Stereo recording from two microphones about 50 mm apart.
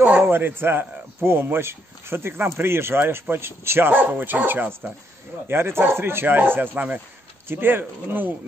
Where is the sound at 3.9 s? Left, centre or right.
Right.